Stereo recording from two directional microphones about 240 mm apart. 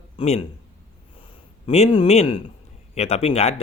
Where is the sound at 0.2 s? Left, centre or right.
Left.